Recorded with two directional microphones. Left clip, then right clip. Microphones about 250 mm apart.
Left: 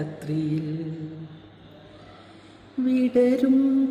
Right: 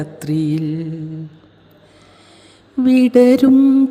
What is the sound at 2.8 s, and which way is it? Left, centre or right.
Mantra, right.